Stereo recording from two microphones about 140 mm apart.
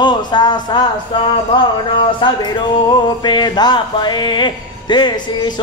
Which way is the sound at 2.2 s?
35° left (ahead or behind).